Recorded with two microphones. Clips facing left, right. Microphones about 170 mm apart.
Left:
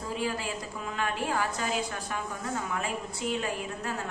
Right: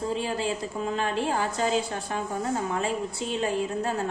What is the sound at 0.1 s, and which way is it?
A woman's voice, 30° right (ahead or behind).